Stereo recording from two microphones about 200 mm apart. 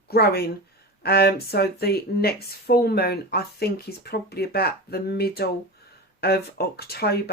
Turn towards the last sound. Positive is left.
turn(degrees=50)  # may be behind; listen again after turning